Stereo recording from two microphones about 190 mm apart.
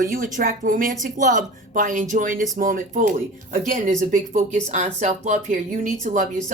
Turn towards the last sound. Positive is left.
turn(degrees=-40)  # may be behind; listen again after turning